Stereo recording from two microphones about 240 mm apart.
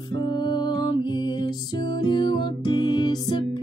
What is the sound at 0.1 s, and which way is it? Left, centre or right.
Music, centre.